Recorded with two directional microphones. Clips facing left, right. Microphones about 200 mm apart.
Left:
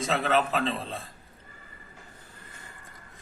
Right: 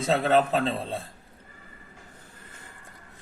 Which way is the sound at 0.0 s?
35° right (ahead or behind).